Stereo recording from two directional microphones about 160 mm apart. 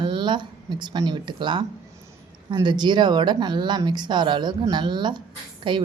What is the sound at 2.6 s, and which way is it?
A woman's voice, 30° right (ahead or behind).